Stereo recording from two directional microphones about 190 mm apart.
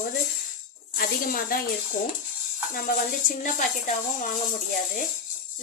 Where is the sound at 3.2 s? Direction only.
45° left (ahead or behind).